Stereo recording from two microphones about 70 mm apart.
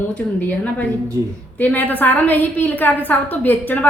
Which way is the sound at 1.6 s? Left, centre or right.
Left.